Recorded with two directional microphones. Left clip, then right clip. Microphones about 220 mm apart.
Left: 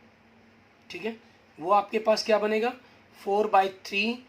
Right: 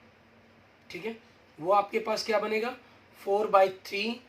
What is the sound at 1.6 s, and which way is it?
Speech, 35° left (ahead or behind).